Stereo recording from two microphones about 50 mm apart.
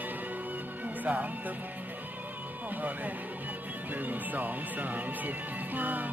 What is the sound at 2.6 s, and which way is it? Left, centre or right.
Speech, right.